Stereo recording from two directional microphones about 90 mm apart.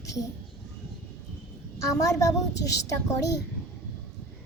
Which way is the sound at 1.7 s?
40° left (ahead or behind).